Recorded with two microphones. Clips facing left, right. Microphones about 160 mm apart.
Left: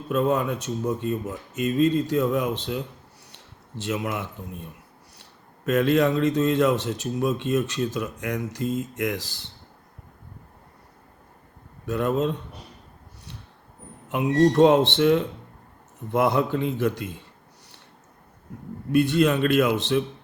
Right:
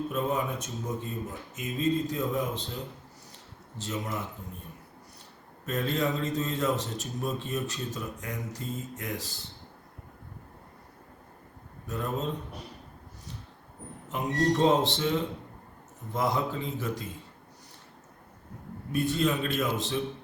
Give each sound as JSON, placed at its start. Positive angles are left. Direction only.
{"t": 0.1, "sound": "speech", "side_deg": 75}
{"t": 3.3, "sound": "a sound", "side_deg": 75}
{"t": 5.6, "sound": "speech", "side_deg": 85}
{"t": 11.9, "sound": "speech", "side_deg": 85}
{"t": 14.1, "sound": "speech", "side_deg": 70}
{"t": 18.9, "sound": "speech", "side_deg": 75}